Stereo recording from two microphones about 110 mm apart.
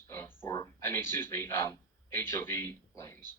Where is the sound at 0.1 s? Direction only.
25° left (ahead or behind).